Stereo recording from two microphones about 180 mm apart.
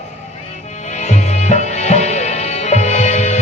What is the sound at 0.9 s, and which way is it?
Music, 40° left (ahead or behind).